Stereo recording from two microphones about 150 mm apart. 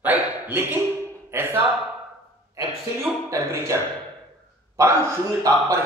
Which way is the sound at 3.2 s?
20° right (ahead or behind).